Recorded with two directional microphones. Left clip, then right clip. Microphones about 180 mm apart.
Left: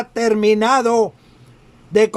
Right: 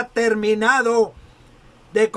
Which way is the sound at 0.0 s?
35° left (ahead or behind).